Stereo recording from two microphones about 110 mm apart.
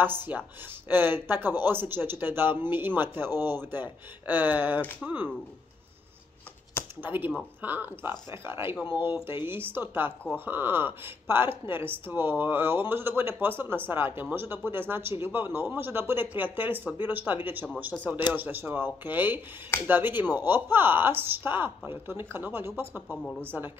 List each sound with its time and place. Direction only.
0.0 s speech: 20° right (ahead or behind)
7.0 s speech: 20° right (ahead or behind)
23.0 s speech: 10° left (ahead or behind)
23.4 s speech: 20° right (ahead or behind)